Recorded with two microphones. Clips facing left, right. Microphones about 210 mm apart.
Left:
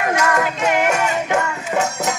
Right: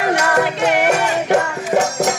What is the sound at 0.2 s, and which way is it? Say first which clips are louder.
Music: right 2 dB; 35° right (ahead or behind).